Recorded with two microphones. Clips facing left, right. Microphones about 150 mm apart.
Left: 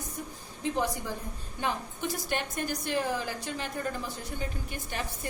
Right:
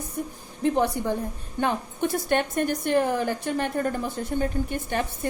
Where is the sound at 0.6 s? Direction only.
60° right (ahead or behind).